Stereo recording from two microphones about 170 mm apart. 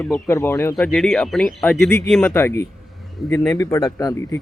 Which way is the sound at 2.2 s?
15° left (ahead or behind).